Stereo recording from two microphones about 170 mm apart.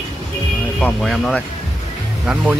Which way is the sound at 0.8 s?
5° left (ahead or behind).